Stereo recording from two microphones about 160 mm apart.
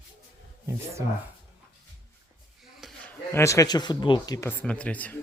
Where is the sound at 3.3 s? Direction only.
20° left (ahead or behind).